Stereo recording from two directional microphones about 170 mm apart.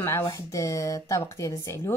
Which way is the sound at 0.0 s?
15° left (ahead or behind).